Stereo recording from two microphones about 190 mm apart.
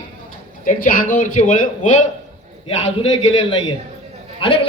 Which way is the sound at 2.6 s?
30° left (ahead or behind).